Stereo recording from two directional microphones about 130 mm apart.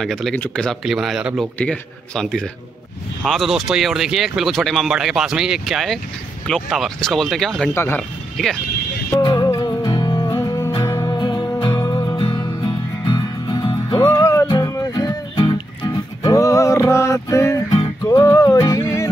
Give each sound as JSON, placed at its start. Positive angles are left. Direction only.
{"t": 0.0, "sound": "speech", "side_deg": 5}
{"t": 0.8, "sound": "speech", "side_deg": -5}
{"t": 7.7, "sound": "speech", "side_deg": 20}
{"t": 9.2, "sound": "music", "side_deg": 30}
{"t": 11.1, "sound": "music", "side_deg": 35}
{"t": 12.2, "sound": "music", "side_deg": 35}
{"t": 14.0, "sound": "music", "side_deg": 20}
{"t": 16.2, "sound": "music", "side_deg": 25}
{"t": 17.6, "sound": "music", "side_deg": 50}
{"t": 18.0, "sound": "music", "side_deg": 25}